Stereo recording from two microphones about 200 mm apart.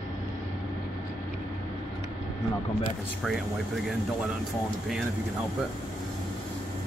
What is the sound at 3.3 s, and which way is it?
Speech, centre (ahead or behind).